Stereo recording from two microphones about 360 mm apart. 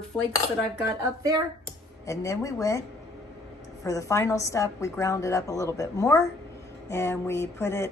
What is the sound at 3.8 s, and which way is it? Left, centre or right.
A woman's voice, centre.